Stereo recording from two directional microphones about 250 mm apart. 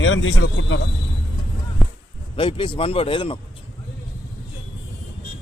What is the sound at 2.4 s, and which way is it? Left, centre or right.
Speech, left.